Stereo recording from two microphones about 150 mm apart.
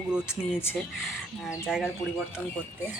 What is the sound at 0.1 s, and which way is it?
Speech, 5° right (ahead or behind).